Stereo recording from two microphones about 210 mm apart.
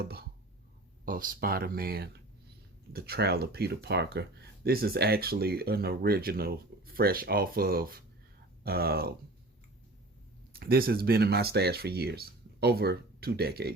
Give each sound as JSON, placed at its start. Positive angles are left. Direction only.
{"t": 0.0, "sound": "speech", "side_deg": -50}
{"t": 10.5, "sound": "speech", "side_deg": -45}